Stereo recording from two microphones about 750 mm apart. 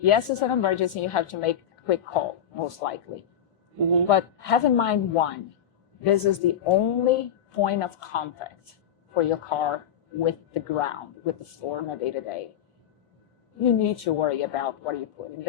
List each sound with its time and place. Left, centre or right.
0.0 s a woman's voice: left
4.1 s a woman's voice: left
13.6 s speech: left